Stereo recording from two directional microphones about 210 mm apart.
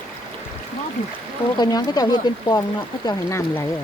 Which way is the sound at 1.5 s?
20° left (ahead or behind).